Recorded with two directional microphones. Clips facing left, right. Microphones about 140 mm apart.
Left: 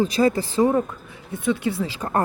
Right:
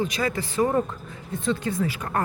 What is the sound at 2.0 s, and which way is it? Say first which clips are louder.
Speech: left 4 dB; 25° left (ahead or behind).